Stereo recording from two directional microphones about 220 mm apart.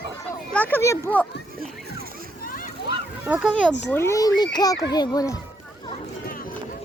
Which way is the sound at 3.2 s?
5° right (ahead or behind).